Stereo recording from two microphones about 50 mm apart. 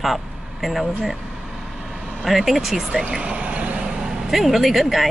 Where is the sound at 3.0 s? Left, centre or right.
Right.